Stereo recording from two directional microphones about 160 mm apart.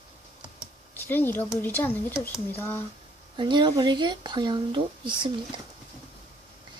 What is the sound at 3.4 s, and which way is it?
Speech, 30° right (ahead or behind).